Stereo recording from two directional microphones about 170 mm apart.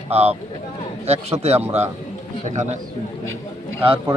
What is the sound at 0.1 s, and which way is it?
A man's voice, 40° right (ahead or behind).